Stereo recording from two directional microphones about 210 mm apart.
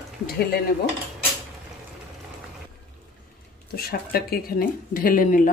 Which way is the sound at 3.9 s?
45° left (ahead or behind).